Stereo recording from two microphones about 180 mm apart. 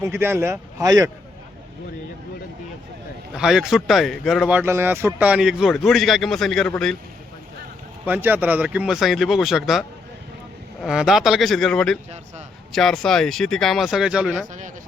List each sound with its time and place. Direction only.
0.0 s speech: 15° right (ahead or behind)
3.3 s speech: 5° right (ahead or behind)
8.0 s speech: 10° right (ahead or behind)
10.8 s speech: centre (ahead or behind)